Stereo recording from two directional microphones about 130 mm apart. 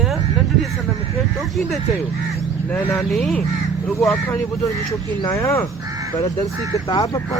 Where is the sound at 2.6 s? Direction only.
15° left (ahead or behind).